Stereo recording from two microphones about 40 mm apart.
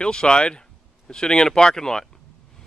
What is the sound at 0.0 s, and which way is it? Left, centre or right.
Speech, left.